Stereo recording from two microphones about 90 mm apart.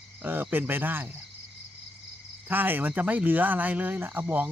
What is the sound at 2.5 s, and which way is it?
Speech, 20° right (ahead or behind).